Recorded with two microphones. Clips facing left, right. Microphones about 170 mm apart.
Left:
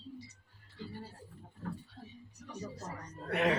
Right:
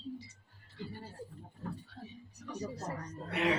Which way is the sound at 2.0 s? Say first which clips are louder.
Right 3 dB; 50° right (ahead or behind).